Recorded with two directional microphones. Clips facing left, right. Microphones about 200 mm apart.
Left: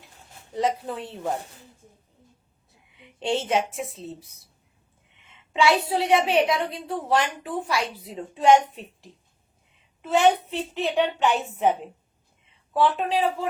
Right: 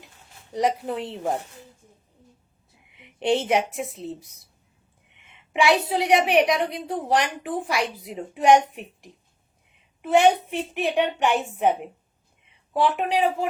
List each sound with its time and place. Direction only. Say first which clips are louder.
0.5 s a woman's voice: right 2 dB; 20° right (ahead or behind)
2.9 s a sound: right 4 dB; 20° right (ahead or behind)
5.5 s a woman's voice: right 1 dB; 20° right (ahead or behind)